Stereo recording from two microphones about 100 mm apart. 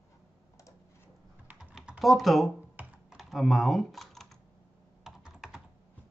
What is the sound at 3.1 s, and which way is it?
Typing, centre (ahead or behind).